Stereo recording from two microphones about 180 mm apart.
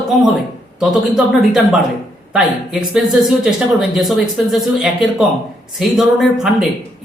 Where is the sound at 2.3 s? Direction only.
5° right (ahead or behind).